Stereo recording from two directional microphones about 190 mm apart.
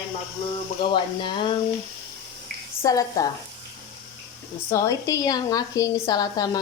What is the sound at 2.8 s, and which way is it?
Speech, 20° left (ahead or behind).